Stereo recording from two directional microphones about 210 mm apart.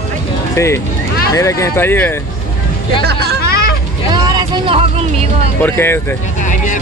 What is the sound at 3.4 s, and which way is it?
Hubbub, 45° left (ahead or behind).